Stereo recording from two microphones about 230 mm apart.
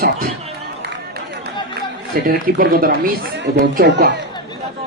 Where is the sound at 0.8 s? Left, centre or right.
Right.